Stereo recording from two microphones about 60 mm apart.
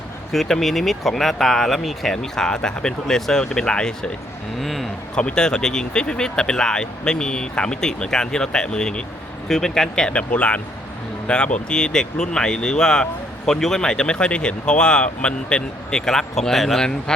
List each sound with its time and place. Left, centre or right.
0.3 s speech: centre
4.6 s speech: centre
5.1 s speech: centre